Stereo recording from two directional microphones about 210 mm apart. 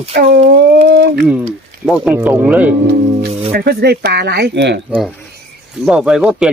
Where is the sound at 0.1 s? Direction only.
60° right (ahead or behind).